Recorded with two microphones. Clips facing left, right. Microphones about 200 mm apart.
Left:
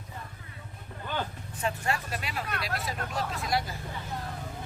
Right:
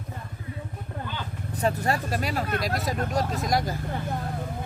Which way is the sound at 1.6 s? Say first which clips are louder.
Right 6 dB; 40° right (ahead or behind).